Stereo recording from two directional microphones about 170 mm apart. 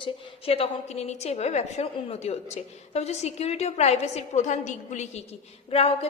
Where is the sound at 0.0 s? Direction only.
35° left (ahead or behind).